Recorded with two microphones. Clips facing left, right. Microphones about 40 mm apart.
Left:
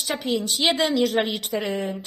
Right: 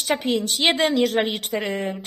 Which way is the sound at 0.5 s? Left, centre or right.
Right.